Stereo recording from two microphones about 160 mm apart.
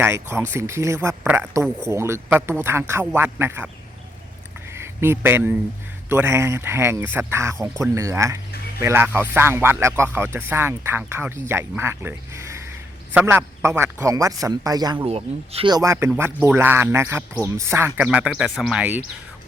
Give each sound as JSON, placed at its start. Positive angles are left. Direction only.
{"t": 0.0, "sound": "speech", "side_deg": -15}
{"t": 4.7, "sound": "speech", "side_deg": -15}
{"t": 15.0, "sound": "speech", "side_deg": -35}
{"t": 15.7, "sound": "speech", "side_deg": -20}